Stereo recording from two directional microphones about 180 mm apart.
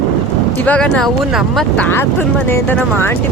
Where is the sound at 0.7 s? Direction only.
5° left (ahead or behind).